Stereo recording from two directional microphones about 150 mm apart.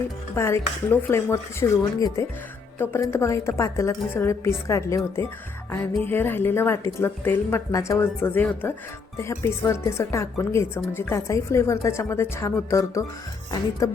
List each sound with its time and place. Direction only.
0.3 s a woman's voice: 15° left (ahead or behind)
6.0 s a woman's voice: 15° left (ahead or behind)